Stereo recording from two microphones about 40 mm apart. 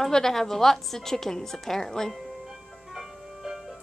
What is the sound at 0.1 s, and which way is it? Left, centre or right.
A woman's voice, centre.